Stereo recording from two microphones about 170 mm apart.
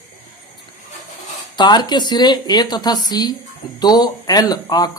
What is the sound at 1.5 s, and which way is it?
Speech, 25° left (ahead or behind).